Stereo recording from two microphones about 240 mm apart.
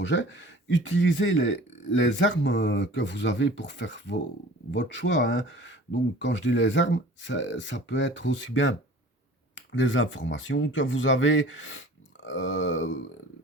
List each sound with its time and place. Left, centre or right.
0.1 s speech: left